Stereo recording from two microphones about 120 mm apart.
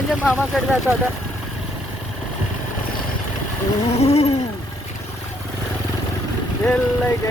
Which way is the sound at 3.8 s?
60° left (ahead or behind).